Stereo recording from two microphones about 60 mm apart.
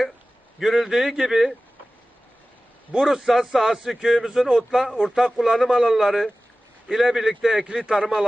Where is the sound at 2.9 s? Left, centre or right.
Centre.